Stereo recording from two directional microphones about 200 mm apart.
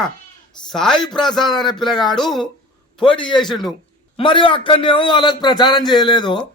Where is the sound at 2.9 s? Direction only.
25° left (ahead or behind).